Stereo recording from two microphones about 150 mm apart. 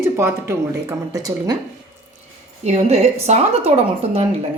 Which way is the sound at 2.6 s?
50° right (ahead or behind).